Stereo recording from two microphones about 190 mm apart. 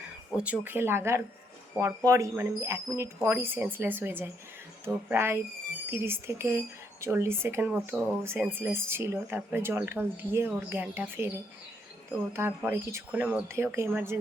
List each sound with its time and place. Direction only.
0.3 s speech: 5° right (ahead or behind)